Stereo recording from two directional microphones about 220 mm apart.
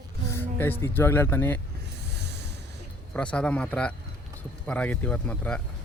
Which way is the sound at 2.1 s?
50° right (ahead or behind).